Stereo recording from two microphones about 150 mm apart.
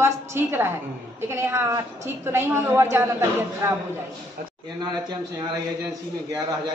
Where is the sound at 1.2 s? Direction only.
15° right (ahead or behind).